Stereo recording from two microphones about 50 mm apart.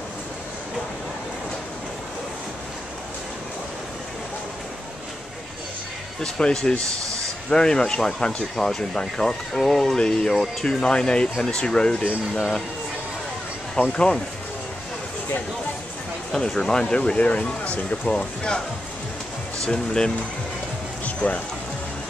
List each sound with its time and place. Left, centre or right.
6.2 s speech: centre
9.5 s speech: centre
9.9 s speech: centre
13.8 s speech: left
16.3 s speech: centre
19.6 s speech: centre
21.0 s music: left